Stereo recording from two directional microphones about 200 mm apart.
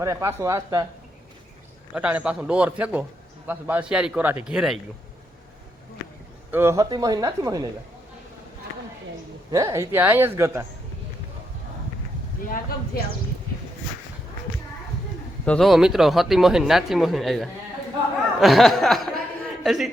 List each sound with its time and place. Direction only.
0.0 s speech: 15° right (ahead or behind)
1.9 s a man's voice: 5° right (ahead or behind)
6.5 s speech: 10° right (ahead or behind)
9.5 s speech: 15° right (ahead or behind)
15.4 s a man's voice: centre (ahead or behind)